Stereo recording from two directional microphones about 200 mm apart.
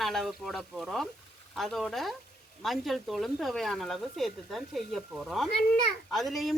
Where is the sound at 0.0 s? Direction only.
Centre (ahead or behind).